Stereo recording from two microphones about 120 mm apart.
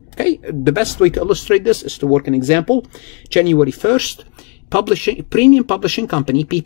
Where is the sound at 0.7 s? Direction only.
5° left (ahead or behind).